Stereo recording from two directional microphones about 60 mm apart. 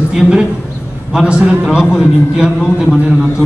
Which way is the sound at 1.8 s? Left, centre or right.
Centre.